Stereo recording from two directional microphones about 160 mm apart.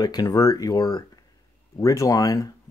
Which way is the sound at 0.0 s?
25° left (ahead or behind).